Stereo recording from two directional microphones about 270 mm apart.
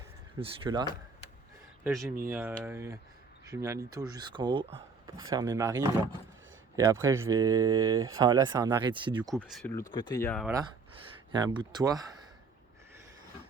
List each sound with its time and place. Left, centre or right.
0.3 s speech: centre
1.8 s speech: centre
7.0 s speech: centre
9.3 s speech: centre
9.9 s speech: centre
10.4 s speech: centre